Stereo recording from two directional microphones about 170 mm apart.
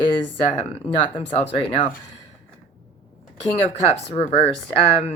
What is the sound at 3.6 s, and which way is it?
Speech, 35° left (ahead or behind).